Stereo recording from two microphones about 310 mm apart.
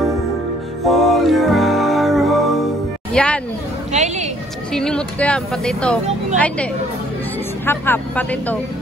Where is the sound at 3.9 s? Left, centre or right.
Right.